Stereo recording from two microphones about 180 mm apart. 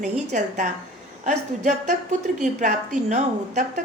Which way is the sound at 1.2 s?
45° right (ahead or behind).